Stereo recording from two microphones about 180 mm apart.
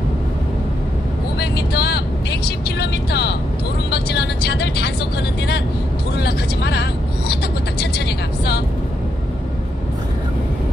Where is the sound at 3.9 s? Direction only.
65° left (ahead or behind).